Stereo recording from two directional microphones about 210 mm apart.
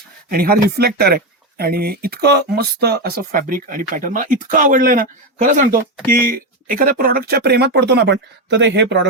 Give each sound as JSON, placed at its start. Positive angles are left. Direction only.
{"t": 0.3, "sound": "speech", "side_deg": -45}